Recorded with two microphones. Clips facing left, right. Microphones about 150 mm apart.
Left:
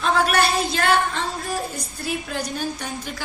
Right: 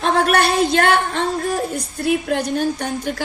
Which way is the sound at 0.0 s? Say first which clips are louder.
Right 3 dB; 60° right (ahead or behind).